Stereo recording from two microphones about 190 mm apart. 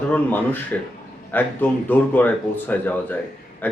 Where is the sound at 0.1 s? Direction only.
10° left (ahead or behind).